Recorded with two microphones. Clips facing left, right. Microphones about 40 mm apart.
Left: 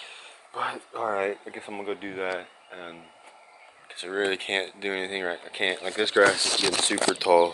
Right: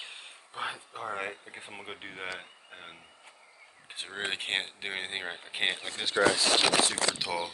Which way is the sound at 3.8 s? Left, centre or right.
Centre.